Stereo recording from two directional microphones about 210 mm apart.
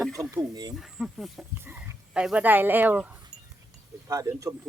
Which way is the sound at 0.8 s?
Centre (ahead or behind).